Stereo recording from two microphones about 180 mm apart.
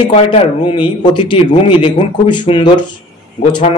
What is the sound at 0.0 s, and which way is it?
Speech, 30° left (ahead or behind).